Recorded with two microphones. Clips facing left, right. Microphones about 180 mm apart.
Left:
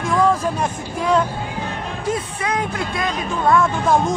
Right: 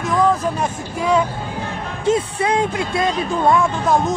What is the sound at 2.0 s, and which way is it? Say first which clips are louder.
Speech: right 6 dB; 25° right (ahead or behind).